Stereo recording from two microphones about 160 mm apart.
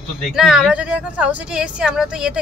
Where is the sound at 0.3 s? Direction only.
5° right (ahead or behind).